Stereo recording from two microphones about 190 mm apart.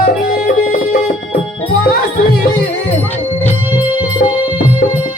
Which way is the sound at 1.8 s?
50° left (ahead or behind).